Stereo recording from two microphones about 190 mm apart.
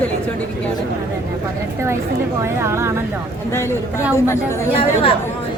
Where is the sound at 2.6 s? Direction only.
15° right (ahead or behind).